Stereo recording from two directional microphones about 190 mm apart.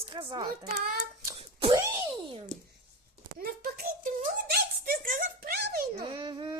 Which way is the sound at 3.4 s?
50° right (ahead or behind).